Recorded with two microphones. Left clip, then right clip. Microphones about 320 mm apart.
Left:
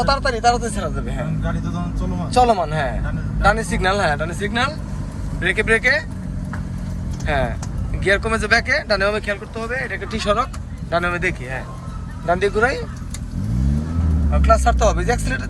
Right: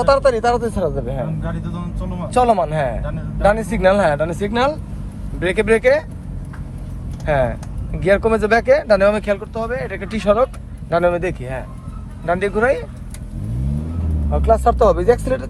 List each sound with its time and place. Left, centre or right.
0.0 s a man's voice: right
2.3 s a man's voice: right
7.3 s a man's voice: centre
14.6 s speech: centre